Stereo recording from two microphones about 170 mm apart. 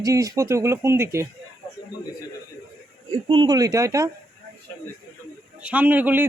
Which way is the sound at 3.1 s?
30° right (ahead or behind).